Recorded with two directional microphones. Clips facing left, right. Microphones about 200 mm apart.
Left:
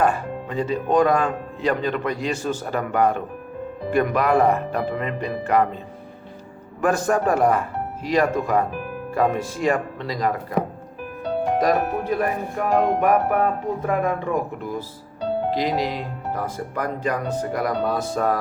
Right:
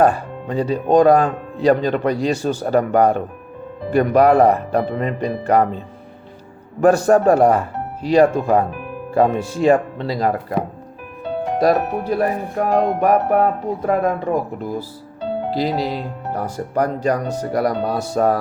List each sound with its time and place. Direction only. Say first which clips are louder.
0.0 s speech: right 5 dB; 35° right (ahead or behind)
6.8 s speech: right 7 dB; 35° right (ahead or behind)
11.6 s speech: right 8 dB; 35° right (ahead or behind)